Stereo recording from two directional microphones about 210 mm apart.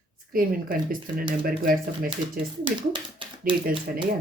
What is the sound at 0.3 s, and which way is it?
Speech, 45° right (ahead or behind).